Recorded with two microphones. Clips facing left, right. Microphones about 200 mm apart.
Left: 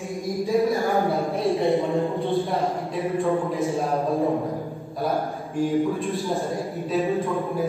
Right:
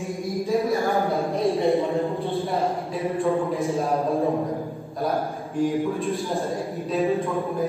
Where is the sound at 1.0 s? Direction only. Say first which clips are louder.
Even; centre (ahead or behind).